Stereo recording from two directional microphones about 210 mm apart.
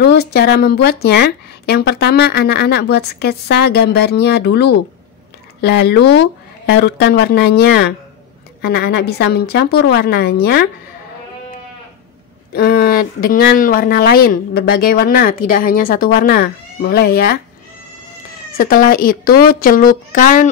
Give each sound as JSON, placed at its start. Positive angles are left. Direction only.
{"t": 0.0, "sound": "a woman's voice", "side_deg": 50}
{"t": 12.5, "sound": "a woman's voice", "side_deg": 45}
{"t": 18.6, "sound": "a woman's voice", "side_deg": 40}